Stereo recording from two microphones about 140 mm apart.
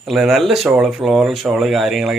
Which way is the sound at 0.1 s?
Centre (ahead or behind).